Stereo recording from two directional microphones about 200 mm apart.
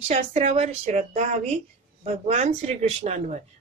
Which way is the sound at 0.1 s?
35° right (ahead or behind).